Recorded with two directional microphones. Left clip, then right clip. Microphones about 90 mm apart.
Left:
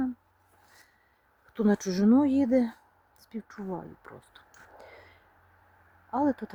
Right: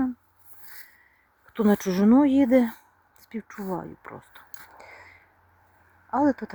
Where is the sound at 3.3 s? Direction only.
15° right (ahead or behind).